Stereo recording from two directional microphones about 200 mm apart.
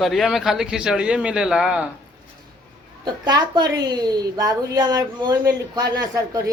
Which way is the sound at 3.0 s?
20° right (ahead or behind).